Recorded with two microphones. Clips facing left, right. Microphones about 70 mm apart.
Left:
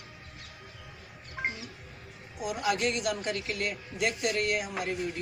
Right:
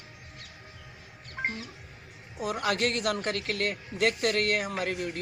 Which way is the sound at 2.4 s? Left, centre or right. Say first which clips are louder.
Right 1 dB; right.